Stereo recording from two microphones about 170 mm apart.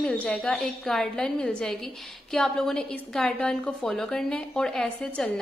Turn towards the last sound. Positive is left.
turn(degrees=5)  # may be behind; listen again after turning